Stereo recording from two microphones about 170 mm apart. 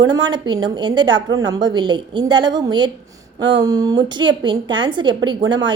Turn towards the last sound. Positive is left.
turn(degrees=-25)  # may be behind; listen again after turning